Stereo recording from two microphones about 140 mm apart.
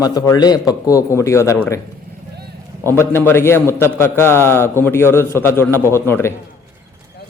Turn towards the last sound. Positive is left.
turn(degrees=15)  # may be behind; listen again after turning